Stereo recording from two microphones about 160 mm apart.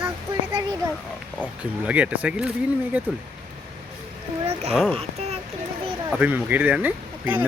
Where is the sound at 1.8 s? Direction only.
10° right (ahead or behind).